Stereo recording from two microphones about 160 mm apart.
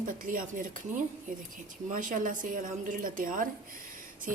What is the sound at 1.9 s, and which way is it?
A woman's voice, 55° right (ahead or behind).